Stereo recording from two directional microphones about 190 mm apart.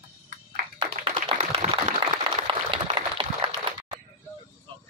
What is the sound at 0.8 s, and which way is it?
Clapping, 30° right (ahead or behind).